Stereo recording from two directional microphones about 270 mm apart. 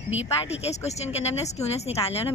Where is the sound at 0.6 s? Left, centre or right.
Left.